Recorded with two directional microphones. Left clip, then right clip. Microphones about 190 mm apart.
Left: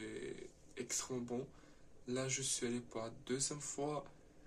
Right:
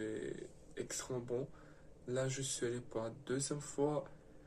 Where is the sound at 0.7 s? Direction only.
15° left (ahead or behind).